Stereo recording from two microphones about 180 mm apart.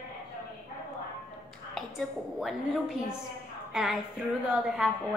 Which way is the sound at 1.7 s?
Centre (ahead or behind).